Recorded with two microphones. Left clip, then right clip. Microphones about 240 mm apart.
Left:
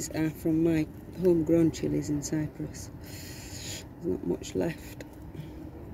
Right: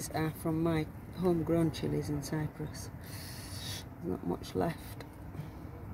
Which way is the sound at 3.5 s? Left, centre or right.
Right.